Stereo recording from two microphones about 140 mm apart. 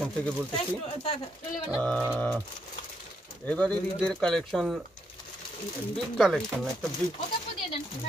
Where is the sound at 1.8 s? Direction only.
5° left (ahead or behind).